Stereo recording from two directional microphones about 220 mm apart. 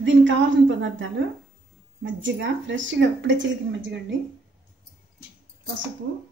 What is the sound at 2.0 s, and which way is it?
Speech, 55° right (ahead or behind).